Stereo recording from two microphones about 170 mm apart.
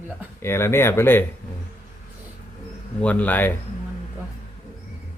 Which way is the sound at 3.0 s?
10° left (ahead or behind).